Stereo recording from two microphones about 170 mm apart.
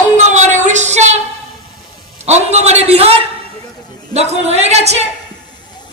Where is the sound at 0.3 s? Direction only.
45° right (ahead or behind).